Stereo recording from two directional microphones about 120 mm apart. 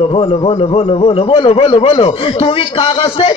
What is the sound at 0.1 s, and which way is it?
A man's voice, 50° left (ahead or behind).